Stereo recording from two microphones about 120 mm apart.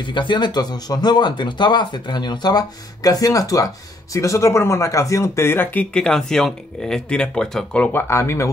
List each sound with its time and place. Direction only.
0.0 s speech: 40° left (ahead or behind); by 8.0 s 10° left (ahead or behind)
8.1 s speech: 20° left (ahead or behind)